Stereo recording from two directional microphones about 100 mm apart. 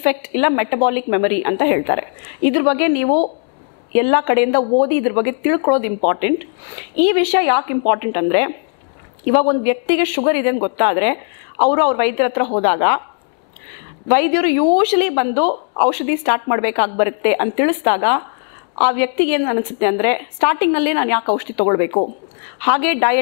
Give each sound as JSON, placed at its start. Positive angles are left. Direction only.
{"t": 0.0, "sound": "a woman's voice", "side_deg": 15}
{"t": 14.0, "sound": "a woman's voice", "side_deg": 15}